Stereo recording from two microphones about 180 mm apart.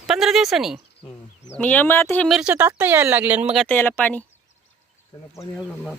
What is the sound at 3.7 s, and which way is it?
Speech, 10° left (ahead or behind).